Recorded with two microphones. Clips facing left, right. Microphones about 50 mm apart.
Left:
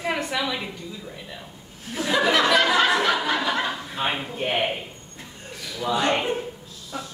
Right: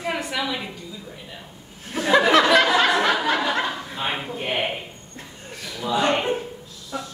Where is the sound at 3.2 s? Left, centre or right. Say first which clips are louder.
Right 2 dB; right.